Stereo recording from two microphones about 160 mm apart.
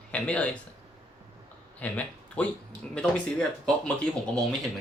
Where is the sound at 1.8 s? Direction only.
10° left (ahead or behind).